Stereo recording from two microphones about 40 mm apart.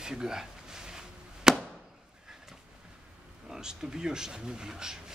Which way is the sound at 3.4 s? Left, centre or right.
Centre.